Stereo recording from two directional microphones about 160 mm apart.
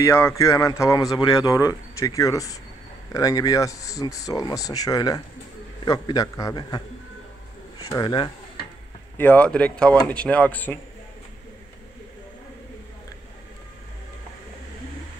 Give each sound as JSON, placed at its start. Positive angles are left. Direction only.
{"t": 0.0, "sound": "speech", "side_deg": 20}
{"t": 7.9, "sound": "speech", "side_deg": 25}
{"t": 9.1, "sound": "speech", "side_deg": 10}